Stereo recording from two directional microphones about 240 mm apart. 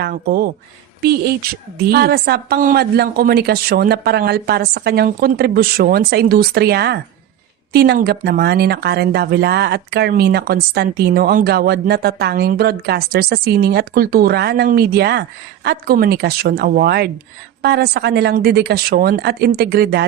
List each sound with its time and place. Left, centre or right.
0.0 s speech: right